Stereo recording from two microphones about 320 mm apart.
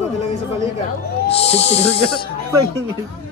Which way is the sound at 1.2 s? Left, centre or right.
Centre.